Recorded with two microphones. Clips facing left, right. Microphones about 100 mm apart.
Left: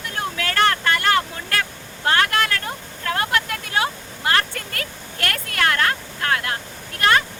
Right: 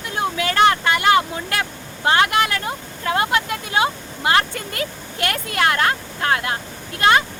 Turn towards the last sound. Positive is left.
turn(degrees=-20)  # may be behind; listen again after turning